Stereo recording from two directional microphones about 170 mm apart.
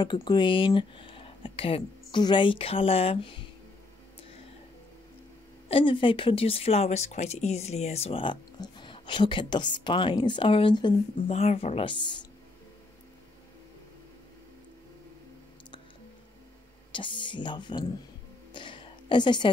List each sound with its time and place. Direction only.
0.0 s speech: 25° left (ahead or behind)
5.7 s speech: 30° left (ahead or behind)
11.2 s speech: 35° left (ahead or behind)
16.9 s speech: 30° left (ahead or behind)
18.5 s a sound: 30° left (ahead or behind)